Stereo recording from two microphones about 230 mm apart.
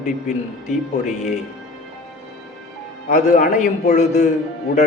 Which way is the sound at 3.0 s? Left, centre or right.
Left.